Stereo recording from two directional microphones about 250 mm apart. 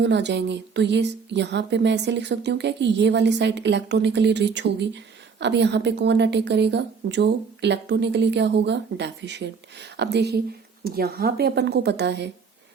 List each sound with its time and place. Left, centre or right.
0.0 s a woman's voice: right